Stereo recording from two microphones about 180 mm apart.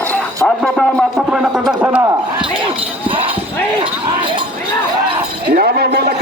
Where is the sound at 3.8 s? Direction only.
25° right (ahead or behind).